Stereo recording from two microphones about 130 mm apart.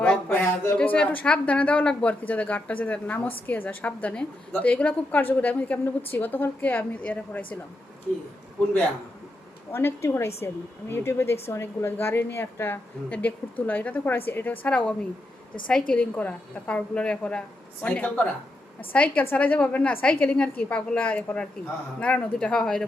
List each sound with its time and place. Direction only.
0.0 s a sound: 10° left (ahead or behind)
0.6 s a woman's voice: 15° left (ahead or behind)
9.7 s a woman's voice: 20° left (ahead or behind)